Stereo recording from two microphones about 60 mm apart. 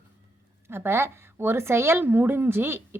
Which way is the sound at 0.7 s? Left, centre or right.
Right.